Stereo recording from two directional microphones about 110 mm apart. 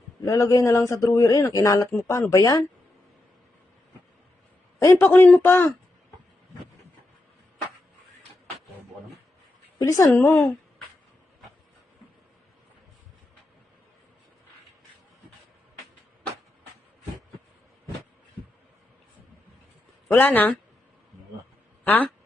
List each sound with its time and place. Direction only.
0.3 s speech: 30° left (ahead or behind)
4.8 s speech: 25° left (ahead or behind)
10.0 s speech: 25° left (ahead or behind)
20.1 s a woman's voice: 15° left (ahead or behind)
21.8 s speech: 15° left (ahead or behind)